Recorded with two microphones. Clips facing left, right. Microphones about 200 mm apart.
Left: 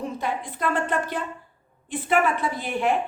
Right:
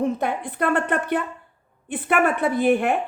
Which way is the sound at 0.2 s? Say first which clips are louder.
Right 4 dB; 60° right (ahead or behind).